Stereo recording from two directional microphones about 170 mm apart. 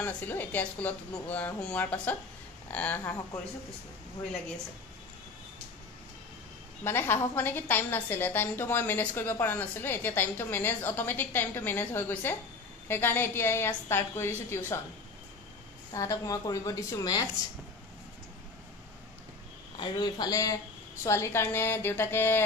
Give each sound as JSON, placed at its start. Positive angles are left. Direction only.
{"t": 0.0, "sound": "a woman's voice", "side_deg": 10}
{"t": 6.8, "sound": "a woman's voice", "side_deg": 15}
{"t": 15.9, "sound": "a woman's voice", "side_deg": 20}
{"t": 19.8, "sound": "a woman's voice", "side_deg": 25}